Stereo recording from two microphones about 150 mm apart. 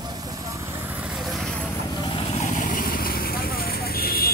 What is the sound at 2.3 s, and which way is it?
Vehicle, 55° left (ahead or behind).